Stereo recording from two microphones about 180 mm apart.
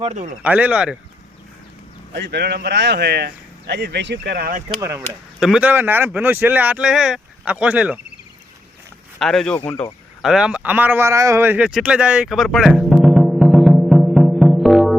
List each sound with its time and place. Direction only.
0.0 s speech: 40° right (ahead or behind)
0.4 s speech: 10° right (ahead or behind)
2.1 s speech: 65° right (ahead or behind)
4.8 s speech: 15° right (ahead or behind)
9.1 s speech: centre (ahead or behind)
10.2 s a sound: 5° right (ahead or behind)